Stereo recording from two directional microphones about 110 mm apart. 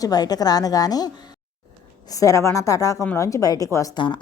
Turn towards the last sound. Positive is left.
turn(degrees=45)  # may be behind; listen again after turning